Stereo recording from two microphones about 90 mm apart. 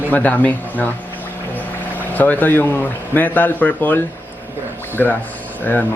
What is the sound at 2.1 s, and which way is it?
Speech, 20° left (ahead or behind).